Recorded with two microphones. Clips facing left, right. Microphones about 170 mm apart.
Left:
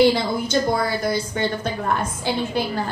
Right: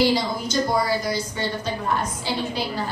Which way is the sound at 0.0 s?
55° left (ahead or behind).